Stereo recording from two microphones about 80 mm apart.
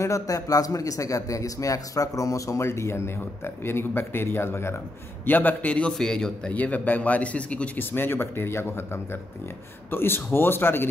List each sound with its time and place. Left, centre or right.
0.0 s a man's voice: left
5.9 s a man's voice: centre; by 10.9 s left